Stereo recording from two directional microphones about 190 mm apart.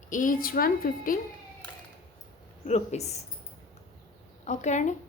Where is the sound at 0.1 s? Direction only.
45° left (ahead or behind).